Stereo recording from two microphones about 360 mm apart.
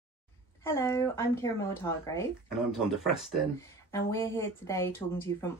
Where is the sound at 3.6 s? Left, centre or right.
Centre.